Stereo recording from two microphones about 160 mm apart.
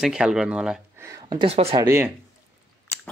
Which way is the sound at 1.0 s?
20° right (ahead or behind).